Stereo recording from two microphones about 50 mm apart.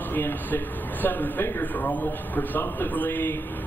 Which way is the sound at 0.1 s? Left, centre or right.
Left.